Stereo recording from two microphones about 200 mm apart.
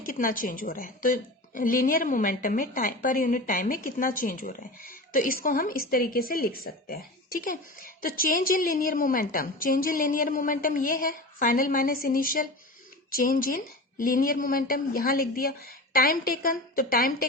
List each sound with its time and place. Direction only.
0.0 s a woman's voice: 45° left (ahead or behind)